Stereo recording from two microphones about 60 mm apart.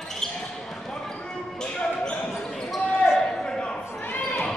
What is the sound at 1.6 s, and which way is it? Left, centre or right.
Basketball bounce, centre.